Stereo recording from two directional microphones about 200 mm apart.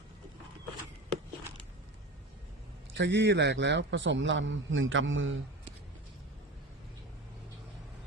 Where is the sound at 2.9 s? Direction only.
60° right (ahead or behind).